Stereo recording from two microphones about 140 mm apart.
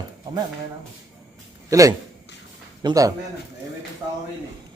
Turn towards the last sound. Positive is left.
turn(degrees=-25)  # may be behind; listen again after turning